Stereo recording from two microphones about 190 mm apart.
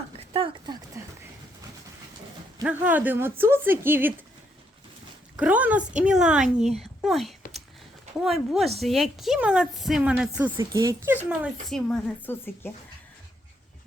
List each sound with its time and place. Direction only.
0.3 s speech: 25° right (ahead or behind)
2.6 s speech: 10° right (ahead or behind)
5.4 s a woman's voice: 10° right (ahead or behind)
10.6 s speech: 20° right (ahead or behind); by 12.7 s 10° left (ahead or behind)